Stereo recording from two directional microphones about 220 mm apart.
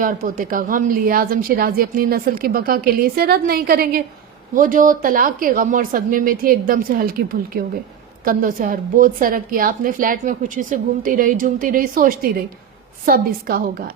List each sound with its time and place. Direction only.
0.0 s a woman's voice: 40° right (ahead or behind)